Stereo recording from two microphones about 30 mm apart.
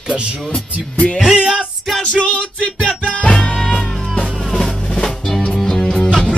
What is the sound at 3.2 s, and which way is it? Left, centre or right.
Music, left.